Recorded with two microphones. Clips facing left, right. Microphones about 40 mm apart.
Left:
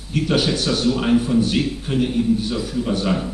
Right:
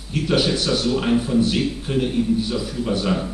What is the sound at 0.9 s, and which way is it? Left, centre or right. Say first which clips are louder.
A man's voice: left 1 dB; centre.